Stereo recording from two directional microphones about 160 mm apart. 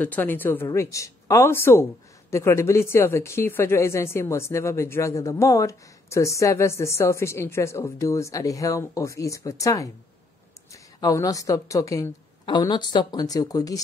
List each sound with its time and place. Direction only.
0.0 s speech: 10° left (ahead or behind)